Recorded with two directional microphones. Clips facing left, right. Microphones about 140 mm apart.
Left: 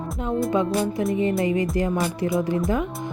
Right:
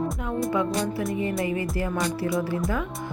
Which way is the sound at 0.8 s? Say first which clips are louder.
Left 4 dB; 25° left (ahead or behind).